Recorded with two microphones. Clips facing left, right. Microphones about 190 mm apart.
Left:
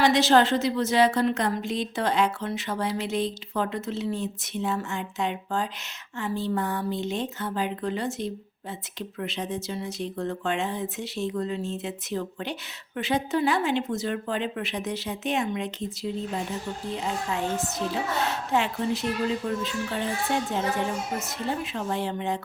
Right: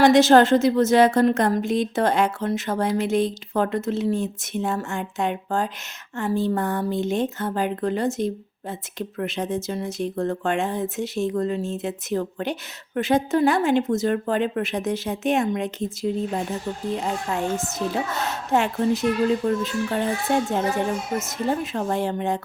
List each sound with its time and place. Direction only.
0.0 s speech: 45° right (ahead or behind)